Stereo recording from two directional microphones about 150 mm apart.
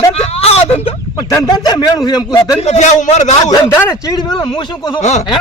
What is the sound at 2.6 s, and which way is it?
Speech, 50° left (ahead or behind).